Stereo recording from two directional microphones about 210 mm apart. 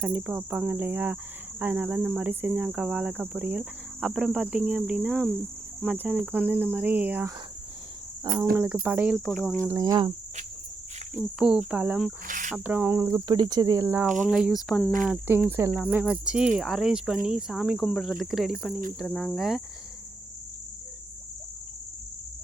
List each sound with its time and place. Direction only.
0.0 s cricket: 10° right (ahead or behind)
8.5 s cricket: 10° right (ahead or behind)
9.6 s cricket: 15° right (ahead or behind)
11.2 s cricket: 5° right (ahead or behind)
12.3 s speech: 40° right (ahead or behind)
12.5 s cricket: 10° right (ahead or behind)